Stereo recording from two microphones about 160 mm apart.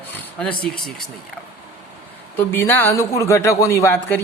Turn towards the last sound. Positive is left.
turn(degrees=15)  # may be behind; listen again after turning